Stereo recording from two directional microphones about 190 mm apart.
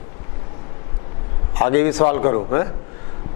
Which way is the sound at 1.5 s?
15° left (ahead or behind).